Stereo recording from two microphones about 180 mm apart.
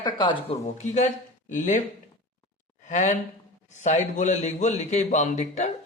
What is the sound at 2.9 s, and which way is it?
A man's voice, 40° left (ahead or behind).